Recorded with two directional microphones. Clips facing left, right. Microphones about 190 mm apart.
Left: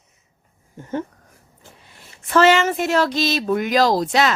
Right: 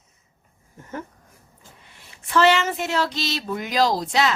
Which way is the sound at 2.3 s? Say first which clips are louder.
Left 4 dB; 50° left (ahead or behind).